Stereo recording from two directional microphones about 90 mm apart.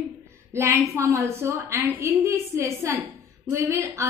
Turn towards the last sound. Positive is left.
turn(degrees=-30)  # may be behind; listen again after turning